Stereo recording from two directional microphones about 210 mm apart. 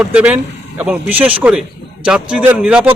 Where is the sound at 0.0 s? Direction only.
5° right (ahead or behind).